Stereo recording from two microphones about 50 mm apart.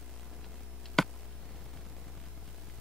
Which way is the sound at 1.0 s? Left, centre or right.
Centre.